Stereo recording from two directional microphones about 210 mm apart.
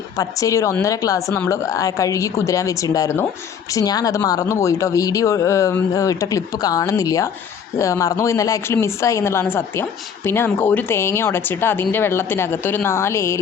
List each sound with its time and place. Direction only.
0.2 s speech: 15° left (ahead or behind)